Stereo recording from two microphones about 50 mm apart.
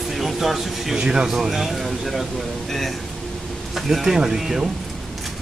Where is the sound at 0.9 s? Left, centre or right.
Centre.